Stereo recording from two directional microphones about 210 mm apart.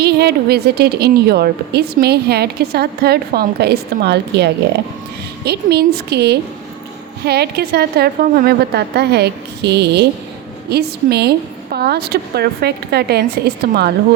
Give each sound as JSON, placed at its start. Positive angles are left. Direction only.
{"t": 0.0, "sound": "a woman's voice", "side_deg": -50}